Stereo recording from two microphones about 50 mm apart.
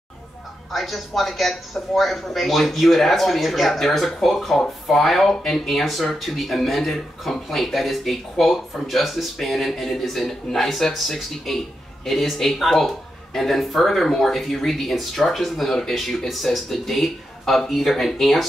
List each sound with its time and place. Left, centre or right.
0.7 s speech: centre